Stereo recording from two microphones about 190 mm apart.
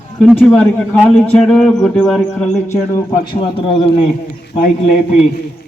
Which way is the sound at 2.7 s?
20° left (ahead or behind).